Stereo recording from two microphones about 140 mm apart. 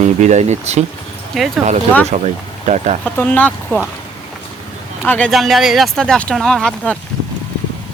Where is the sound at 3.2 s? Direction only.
10° left (ahead or behind).